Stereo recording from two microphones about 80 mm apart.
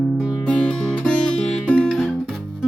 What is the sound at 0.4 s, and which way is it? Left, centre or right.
Music, centre.